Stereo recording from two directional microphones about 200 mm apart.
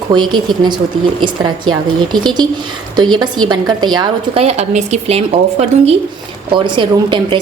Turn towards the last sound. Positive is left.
turn(degrees=-25)  # may be behind; listen again after turning